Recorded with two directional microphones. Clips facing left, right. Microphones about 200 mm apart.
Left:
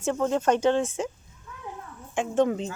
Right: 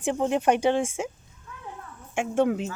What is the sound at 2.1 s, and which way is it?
Speech, 10° right (ahead or behind).